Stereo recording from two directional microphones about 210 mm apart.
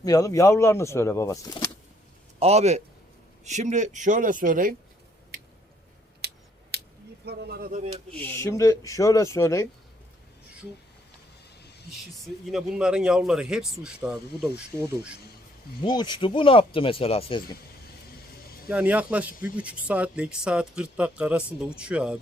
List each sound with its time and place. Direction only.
0.0 s speech: 15° left (ahead or behind)
2.4 s speech: 30° right (ahead or behind)
6.2 s finger snapping: 50° right (ahead or behind)
7.3 s speech: 50° right (ahead or behind)
7.7 s speech: 35° right (ahead or behind)
8.4 s speech: 15° left (ahead or behind)
12.5 s speech: 5° right (ahead or behind)
15.8 s speech: 20° left (ahead or behind)
18.7 s speech: 5° right (ahead or behind)